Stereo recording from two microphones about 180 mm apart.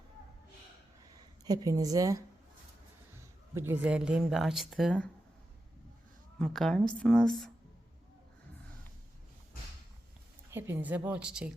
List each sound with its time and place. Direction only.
1.5 s a woman's voice: 20° right (ahead or behind)
3.5 s speech: 10° right (ahead or behind)
6.4 s speech: centre (ahead or behind)
10.5 s speech: 10° right (ahead or behind)